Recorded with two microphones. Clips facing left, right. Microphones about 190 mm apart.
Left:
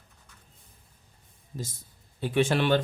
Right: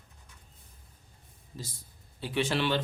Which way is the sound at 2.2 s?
50° left (ahead or behind).